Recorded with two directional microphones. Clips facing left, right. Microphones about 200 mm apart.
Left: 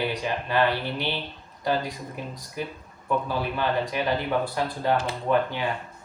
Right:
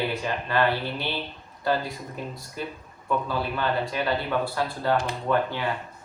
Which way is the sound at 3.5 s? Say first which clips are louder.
Left 1 dB; 15° left (ahead or behind).